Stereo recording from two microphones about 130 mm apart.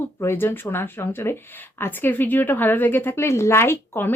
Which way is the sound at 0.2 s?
20° left (ahead or behind).